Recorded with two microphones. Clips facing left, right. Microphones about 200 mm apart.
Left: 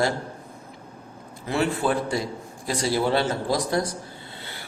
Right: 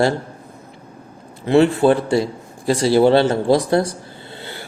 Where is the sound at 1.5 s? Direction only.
25° right (ahead or behind).